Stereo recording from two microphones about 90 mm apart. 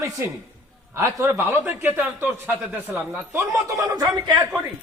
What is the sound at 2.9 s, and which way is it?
Speech, 35° right (ahead or behind).